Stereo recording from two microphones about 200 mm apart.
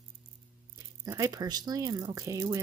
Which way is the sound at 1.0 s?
15° right (ahead or behind).